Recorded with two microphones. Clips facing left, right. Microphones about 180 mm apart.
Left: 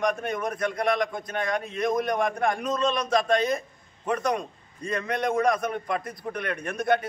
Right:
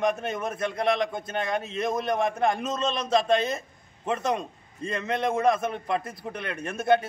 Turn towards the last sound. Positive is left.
turn(degrees=-25)  # may be behind; listen again after turning